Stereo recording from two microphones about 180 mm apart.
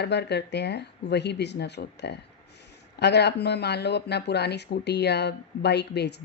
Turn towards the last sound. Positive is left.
turn(degrees=70)  # may be behind; listen again after turning